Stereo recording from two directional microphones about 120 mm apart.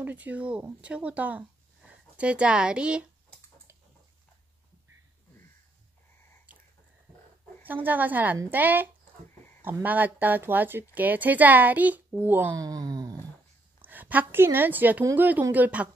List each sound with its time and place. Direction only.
0.0 s a woman's voice: 15° right (ahead or behind)
7.6 s a woman's voice: 15° right (ahead or behind)
12.5 s speech: 30° right (ahead or behind)
13.7 s a woman's voice: 15° right (ahead or behind)